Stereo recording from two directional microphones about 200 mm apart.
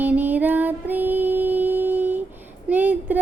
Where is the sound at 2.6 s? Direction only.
10° right (ahead or behind).